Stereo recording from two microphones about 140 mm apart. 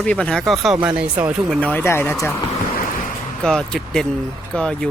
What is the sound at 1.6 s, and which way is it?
Speech, 15° left (ahead or behind).